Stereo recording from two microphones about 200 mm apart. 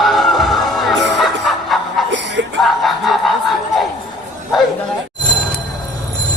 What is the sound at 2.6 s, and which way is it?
Snicker, centre (ahead or behind).